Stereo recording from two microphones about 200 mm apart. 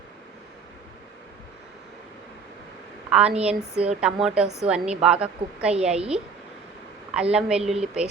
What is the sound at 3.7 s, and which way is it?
A woman's voice, 5° right (ahead or behind).